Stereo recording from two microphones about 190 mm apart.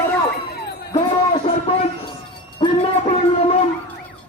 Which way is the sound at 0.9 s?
30° left (ahead or behind).